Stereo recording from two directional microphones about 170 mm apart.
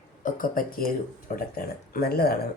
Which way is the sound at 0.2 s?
50° left (ahead or behind).